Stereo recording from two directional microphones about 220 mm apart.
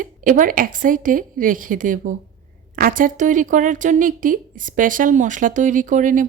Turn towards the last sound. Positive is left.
turn(degrees=-35)  # may be behind; listen again after turning